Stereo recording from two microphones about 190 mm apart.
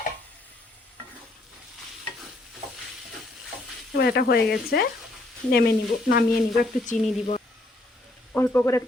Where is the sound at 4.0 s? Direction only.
55° left (ahead or behind).